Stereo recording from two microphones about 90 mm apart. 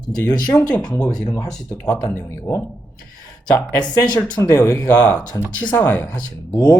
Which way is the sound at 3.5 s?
45° left (ahead or behind).